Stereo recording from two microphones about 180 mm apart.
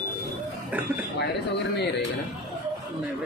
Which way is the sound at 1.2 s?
70° left (ahead or behind).